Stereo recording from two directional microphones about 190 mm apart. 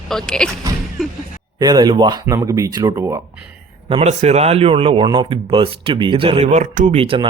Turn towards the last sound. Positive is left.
turn(degrees=-30)  # may be behind; listen again after turning